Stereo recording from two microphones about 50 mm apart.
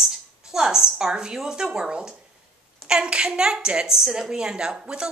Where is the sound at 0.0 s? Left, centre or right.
Centre.